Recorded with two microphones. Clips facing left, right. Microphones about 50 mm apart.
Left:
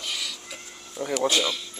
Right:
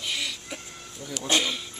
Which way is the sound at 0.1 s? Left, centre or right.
Right.